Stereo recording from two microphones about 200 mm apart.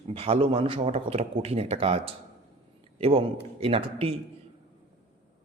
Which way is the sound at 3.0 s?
30° right (ahead or behind).